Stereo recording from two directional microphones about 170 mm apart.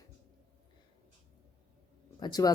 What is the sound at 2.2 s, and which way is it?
Speech, 20° left (ahead or behind).